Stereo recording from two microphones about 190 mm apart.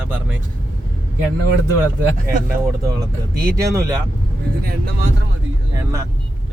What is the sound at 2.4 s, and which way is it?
Speech, 20° right (ahead or behind).